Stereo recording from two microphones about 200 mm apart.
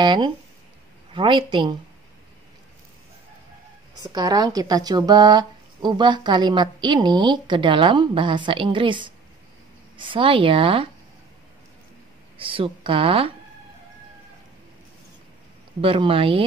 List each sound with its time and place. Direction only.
0.0 s speech: 25° right (ahead or behind)
4.0 s speech: 20° right (ahead or behind)
12.4 s speech: 25° right (ahead or behind)
15.8 s speech: 25° right (ahead or behind)